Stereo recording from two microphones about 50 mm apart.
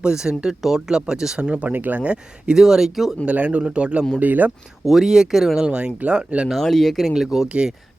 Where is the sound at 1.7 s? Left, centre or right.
Right.